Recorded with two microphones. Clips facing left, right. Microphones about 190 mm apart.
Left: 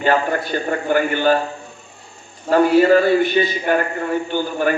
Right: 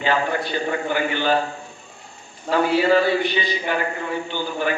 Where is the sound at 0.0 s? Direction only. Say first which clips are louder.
Left 4 dB; 45° left (ahead or behind).